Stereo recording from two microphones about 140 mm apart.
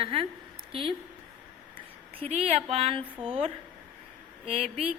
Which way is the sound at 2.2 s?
45° right (ahead or behind).